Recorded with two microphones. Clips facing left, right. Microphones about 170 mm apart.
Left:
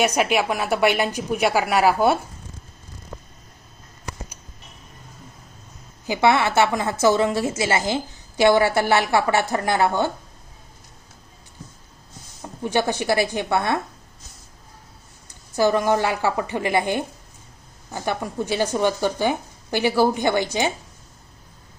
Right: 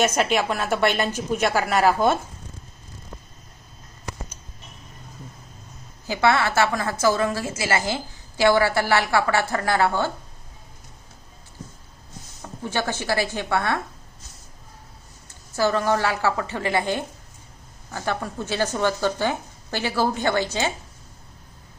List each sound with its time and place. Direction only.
0.0 s speech: 10° left (ahead or behind)
6.1 s a woman's voice: 20° left (ahead or behind)
12.4 s speech: 15° left (ahead or behind)
15.3 s speech: 15° left (ahead or behind)